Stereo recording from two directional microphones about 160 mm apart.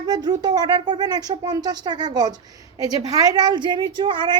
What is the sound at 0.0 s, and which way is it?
A woman's voice, 25° right (ahead or behind).